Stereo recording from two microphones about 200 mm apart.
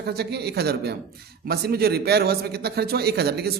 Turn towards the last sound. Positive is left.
turn(degrees=-55)  # may be behind; listen again after turning